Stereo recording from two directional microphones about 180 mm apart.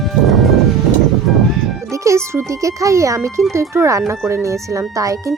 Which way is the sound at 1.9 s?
15° right (ahead or behind).